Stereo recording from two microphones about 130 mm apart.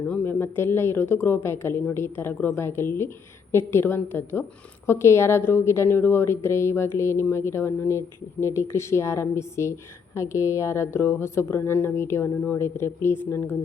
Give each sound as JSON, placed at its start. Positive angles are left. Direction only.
{"t": 0.1, "sound": "a woman's voice", "side_deg": 20}